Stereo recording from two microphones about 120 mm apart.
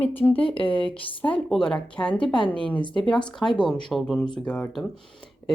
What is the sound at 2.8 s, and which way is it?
Speech, 40° left (ahead or behind).